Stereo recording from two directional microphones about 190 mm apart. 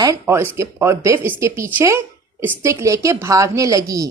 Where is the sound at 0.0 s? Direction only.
15° right (ahead or behind).